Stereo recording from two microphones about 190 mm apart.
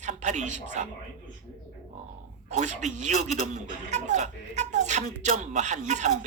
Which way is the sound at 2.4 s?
40° right (ahead or behind).